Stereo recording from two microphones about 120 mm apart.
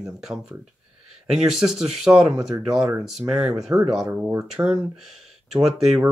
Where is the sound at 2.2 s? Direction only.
30° right (ahead or behind).